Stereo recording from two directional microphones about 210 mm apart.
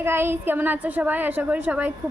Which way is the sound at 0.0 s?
10° right (ahead or behind).